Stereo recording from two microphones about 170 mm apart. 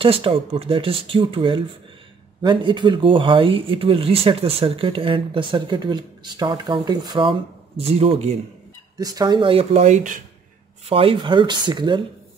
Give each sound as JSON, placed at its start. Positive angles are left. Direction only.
{"t": 0.0, "sound": "speech", "side_deg": -30}
{"t": 8.9, "sound": "speech", "side_deg": -25}
{"t": 10.9, "sound": "speech", "side_deg": -35}